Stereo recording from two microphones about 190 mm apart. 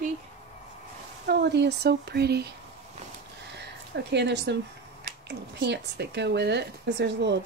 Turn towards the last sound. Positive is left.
turn(degrees=-65)  # may be behind; listen again after turning